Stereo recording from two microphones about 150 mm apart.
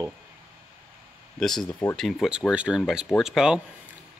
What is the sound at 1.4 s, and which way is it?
Speech, 5° left (ahead or behind).